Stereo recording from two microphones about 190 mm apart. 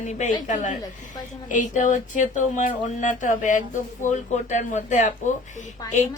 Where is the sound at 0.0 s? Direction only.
40° left (ahead or behind).